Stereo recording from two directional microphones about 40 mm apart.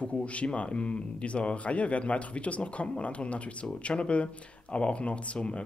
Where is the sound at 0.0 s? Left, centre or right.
Left.